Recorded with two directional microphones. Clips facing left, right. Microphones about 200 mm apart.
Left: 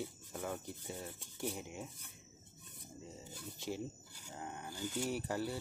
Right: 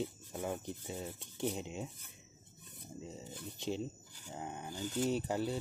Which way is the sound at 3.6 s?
20° right (ahead or behind).